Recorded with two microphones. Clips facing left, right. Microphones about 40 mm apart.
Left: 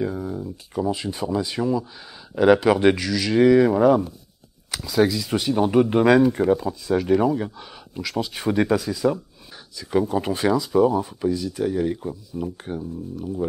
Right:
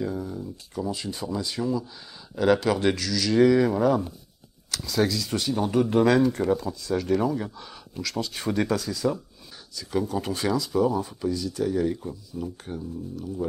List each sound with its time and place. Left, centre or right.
0.0 s speech: centre